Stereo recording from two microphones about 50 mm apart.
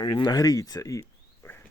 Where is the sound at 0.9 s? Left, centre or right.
Left.